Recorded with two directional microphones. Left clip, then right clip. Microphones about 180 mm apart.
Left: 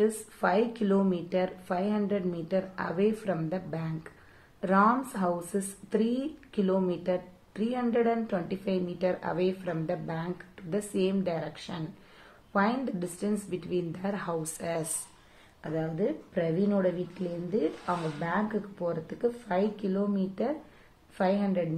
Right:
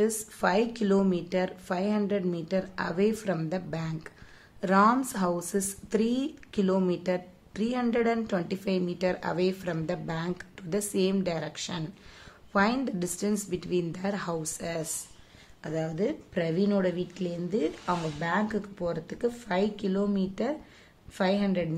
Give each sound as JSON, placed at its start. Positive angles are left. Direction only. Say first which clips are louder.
{"t": 0.0, "sound": "a woman's voice", "louder": "even", "side_deg": -40}